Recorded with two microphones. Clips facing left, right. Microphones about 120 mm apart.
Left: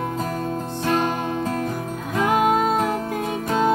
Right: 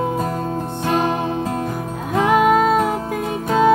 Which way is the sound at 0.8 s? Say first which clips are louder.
Right 3 dB; 20° right (ahead or behind).